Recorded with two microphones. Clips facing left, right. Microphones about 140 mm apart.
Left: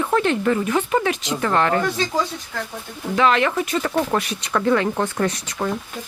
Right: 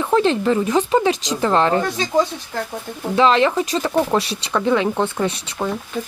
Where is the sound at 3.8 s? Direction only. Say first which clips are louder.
Right 3 dB; 15° right (ahead or behind).